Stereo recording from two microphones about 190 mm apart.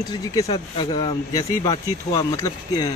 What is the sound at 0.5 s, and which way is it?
Speech, 25° left (ahead or behind).